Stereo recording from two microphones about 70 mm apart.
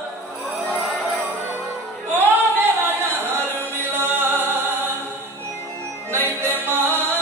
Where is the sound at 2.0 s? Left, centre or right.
Right.